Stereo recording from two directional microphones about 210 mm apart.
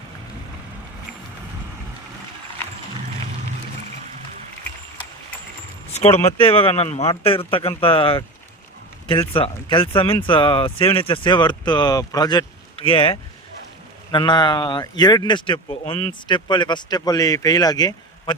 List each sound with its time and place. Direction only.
6.3 s speech: 25° left (ahead or behind)